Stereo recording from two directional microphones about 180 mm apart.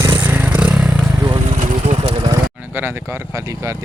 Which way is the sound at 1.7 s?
30° right (ahead or behind).